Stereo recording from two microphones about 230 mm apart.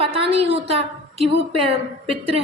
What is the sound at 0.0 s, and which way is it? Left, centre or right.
A woman's voice, right.